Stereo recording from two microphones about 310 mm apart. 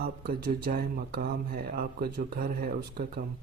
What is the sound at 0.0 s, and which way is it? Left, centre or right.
Speech, right.